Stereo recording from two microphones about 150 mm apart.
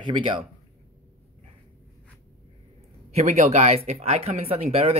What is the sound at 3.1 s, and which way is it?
Speech, 50° right (ahead or behind).